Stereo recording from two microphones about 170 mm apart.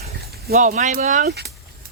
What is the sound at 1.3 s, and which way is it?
Speech, 75° right (ahead or behind).